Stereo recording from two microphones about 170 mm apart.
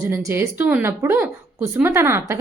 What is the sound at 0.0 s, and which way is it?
A woman's voice, 15° right (ahead or behind).